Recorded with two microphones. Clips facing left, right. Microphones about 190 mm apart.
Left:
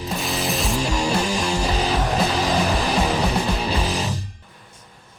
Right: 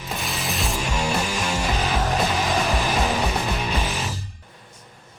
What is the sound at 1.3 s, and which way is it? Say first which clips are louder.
Music: left 3 dB; 30° left (ahead or behind).